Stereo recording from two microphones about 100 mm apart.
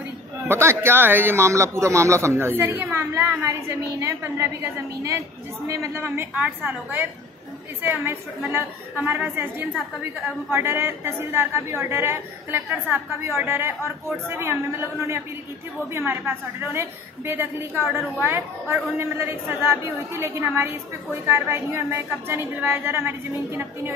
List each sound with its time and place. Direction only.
0.5 s a man's voice: 25° right (ahead or behind)
5.7 s a man's voice: 25° right (ahead or behind)